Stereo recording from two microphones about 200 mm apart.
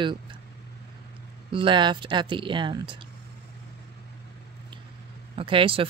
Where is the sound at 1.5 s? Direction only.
25° right (ahead or behind).